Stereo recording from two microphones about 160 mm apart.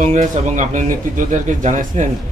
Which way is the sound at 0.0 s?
50° right (ahead or behind).